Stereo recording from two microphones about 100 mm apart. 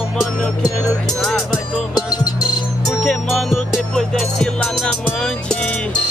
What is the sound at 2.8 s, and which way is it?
Music, centre (ahead or behind).